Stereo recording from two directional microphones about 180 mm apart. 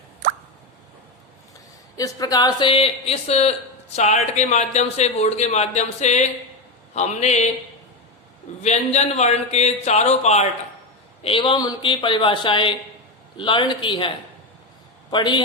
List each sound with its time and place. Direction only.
2.0 s a man's voice: 20° left (ahead or behind); by 7.5 s 40° left (ahead or behind)
8.6 s a man's voice: 40° left (ahead or behind)
15.1 s speech: 25° left (ahead or behind)